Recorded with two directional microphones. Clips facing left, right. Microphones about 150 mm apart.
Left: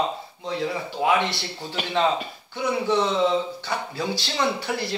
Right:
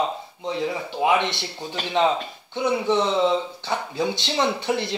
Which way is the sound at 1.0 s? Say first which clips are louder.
Right 1 dB; 20° right (ahead or behind).